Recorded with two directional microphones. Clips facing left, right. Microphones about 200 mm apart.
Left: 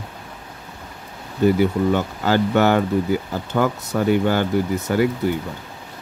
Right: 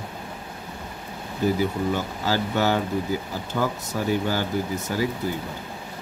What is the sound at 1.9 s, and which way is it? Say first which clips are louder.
Speech: left 6 dB; 60° left (ahead or behind).